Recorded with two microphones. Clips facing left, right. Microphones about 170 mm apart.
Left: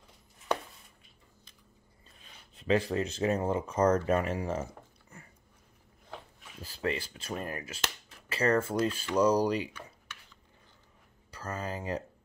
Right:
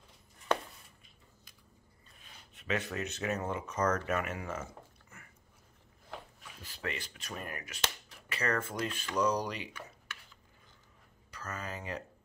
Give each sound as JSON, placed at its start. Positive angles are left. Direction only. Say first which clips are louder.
{"t": 2.5, "sound": "speech", "louder": "left 8 dB", "side_deg": 30}
{"t": 6.6, "sound": "speech", "louder": "left 7 dB", "side_deg": 30}
{"t": 11.3, "sound": "speech", "louder": "left 5 dB", "side_deg": 30}